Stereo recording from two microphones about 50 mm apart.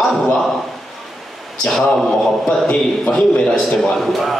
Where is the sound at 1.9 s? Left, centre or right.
Centre.